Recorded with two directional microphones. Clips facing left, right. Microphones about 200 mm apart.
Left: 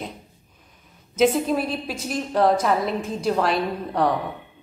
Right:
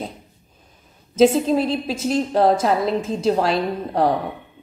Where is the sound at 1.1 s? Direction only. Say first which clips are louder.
Right 4 dB; 30° right (ahead or behind).